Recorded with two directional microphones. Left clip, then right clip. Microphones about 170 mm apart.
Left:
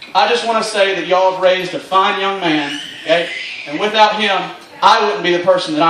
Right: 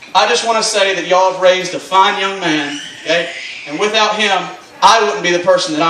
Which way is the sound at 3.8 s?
30° right (ahead or behind).